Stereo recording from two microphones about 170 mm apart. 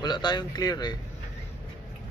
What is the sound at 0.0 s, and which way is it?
Speech, 25° left (ahead or behind).